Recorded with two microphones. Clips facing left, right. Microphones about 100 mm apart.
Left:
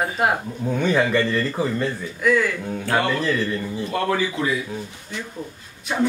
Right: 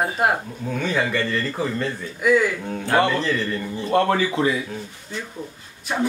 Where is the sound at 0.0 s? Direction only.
Centre (ahead or behind).